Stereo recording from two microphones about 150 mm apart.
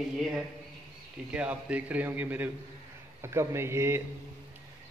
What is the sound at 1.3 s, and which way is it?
A man's voice, 10° right (ahead or behind).